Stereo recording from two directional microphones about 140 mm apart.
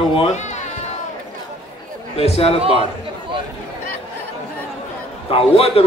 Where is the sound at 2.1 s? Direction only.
45° left (ahead or behind).